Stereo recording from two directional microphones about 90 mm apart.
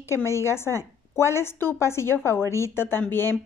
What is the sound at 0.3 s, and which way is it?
A woman's voice, 30° left (ahead or behind).